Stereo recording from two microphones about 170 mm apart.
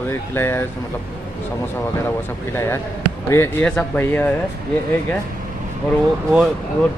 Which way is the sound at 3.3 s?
15° left (ahead or behind).